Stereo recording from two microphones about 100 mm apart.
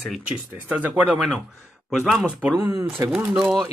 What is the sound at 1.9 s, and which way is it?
Speech, centre (ahead or behind).